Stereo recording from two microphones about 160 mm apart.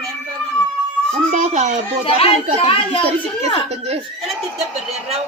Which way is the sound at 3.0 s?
40° right (ahead or behind).